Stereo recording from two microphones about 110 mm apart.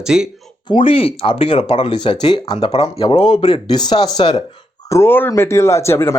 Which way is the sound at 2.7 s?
60° left (ahead or behind).